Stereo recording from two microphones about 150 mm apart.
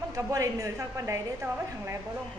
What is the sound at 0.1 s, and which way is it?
A woman's voice, 20° right (ahead or behind).